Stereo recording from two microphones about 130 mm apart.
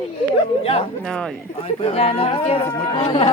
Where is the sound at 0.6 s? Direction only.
45° left (ahead or behind).